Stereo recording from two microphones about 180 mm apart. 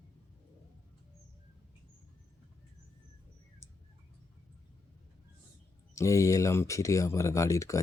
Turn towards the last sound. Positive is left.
turn(degrees=15)  # may be behind; listen again after turning